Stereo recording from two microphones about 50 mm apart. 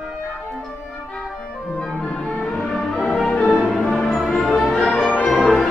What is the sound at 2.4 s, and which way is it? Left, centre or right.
Music, centre.